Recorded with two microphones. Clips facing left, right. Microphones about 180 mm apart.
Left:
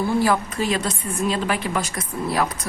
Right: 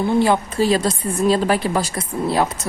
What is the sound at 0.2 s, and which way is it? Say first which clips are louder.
Speech: right 4 dB; 25° right (ahead or behind).